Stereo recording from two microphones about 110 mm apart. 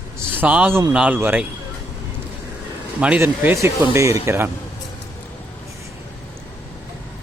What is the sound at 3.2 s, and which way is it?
Speech, 25° right (ahead or behind).